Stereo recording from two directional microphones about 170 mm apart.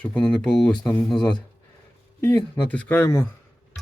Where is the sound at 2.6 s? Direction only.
5° left (ahead or behind).